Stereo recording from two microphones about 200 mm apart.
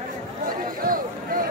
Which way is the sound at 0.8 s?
45° right (ahead or behind).